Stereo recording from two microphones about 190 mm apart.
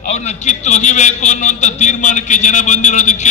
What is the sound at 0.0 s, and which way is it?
A man's voice, 35° left (ahead or behind).